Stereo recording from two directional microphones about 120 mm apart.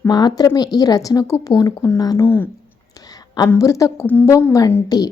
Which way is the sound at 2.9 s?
30° left (ahead or behind).